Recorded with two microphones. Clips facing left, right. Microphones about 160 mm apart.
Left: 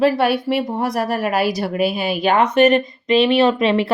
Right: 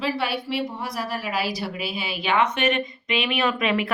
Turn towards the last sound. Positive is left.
turn(degrees=30)  # may be behind; listen again after turning